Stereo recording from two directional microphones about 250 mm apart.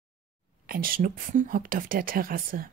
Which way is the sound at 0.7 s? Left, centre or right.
Right.